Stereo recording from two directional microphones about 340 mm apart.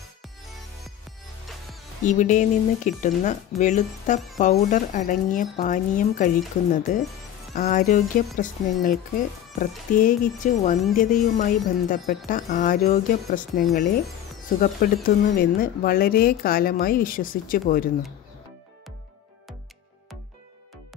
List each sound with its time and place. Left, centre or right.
2.0 s speech: left